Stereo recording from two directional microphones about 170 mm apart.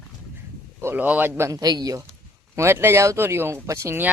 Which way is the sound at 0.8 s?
10° right (ahead or behind).